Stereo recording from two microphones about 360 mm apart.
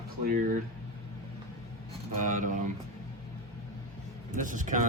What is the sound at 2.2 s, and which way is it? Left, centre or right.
Speech, right.